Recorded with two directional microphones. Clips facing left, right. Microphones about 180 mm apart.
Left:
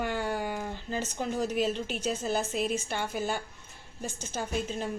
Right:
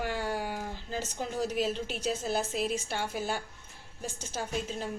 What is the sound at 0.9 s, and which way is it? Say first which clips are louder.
Speech: left 2 dB; 50° left (ahead or behind).